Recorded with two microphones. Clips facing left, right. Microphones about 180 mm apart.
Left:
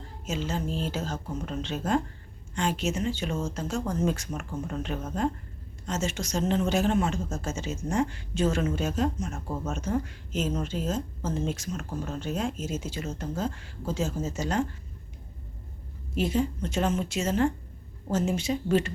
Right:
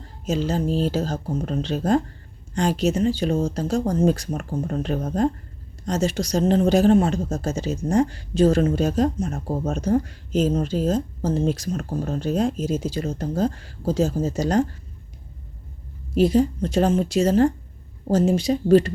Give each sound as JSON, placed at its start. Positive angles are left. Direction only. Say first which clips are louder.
{"t": 0.3, "sound": "a woman's voice", "louder": "right 8 dB", "side_deg": -35}
{"t": 16.1, "sound": "a woman's voice", "louder": "right 9 dB", "side_deg": -35}